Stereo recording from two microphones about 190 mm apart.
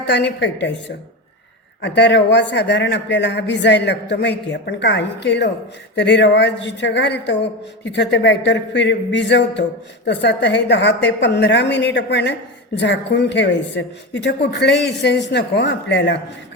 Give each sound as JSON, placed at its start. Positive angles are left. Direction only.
{"t": 0.1, "sound": "a woman's voice", "side_deg": 65}